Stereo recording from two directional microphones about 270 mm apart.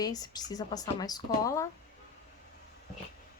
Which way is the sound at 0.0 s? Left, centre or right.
Centre.